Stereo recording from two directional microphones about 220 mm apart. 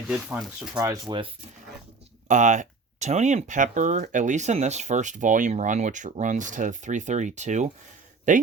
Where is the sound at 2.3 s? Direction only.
35° right (ahead or behind).